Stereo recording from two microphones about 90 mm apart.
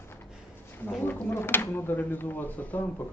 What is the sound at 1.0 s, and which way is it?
Speech, 20° left (ahead or behind).